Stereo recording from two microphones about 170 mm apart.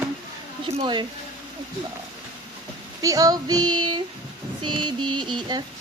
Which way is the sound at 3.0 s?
20° right (ahead or behind).